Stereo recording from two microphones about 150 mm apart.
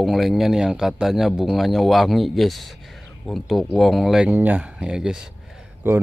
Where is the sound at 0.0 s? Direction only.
Centre (ahead or behind).